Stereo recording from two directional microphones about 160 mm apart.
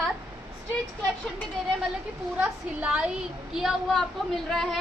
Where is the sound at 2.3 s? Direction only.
10° right (ahead or behind).